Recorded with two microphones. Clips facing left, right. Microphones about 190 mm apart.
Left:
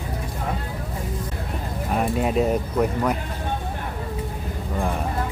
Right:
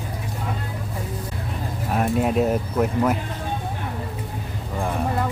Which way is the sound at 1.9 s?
Centre (ahead or behind).